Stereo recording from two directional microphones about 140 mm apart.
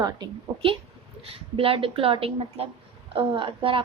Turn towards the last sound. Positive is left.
turn(degrees=-40)  # may be behind; listen again after turning